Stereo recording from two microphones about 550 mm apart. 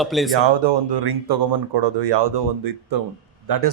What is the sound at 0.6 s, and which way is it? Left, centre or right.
A man's voice, right.